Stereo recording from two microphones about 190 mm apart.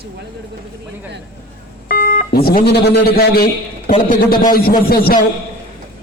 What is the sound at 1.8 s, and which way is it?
A man's voice, 50° left (ahead or behind).